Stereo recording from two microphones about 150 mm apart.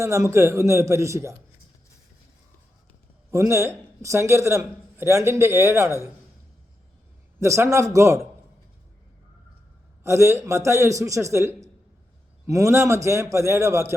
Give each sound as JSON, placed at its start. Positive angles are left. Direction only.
{"t": 0.0, "sound": "a man's voice", "side_deg": -20}
{"t": 3.3, "sound": "a man's voice", "side_deg": -20}
{"t": 7.3, "sound": "a man's voice", "side_deg": -20}
{"t": 10.0, "sound": "a man's voice", "side_deg": -20}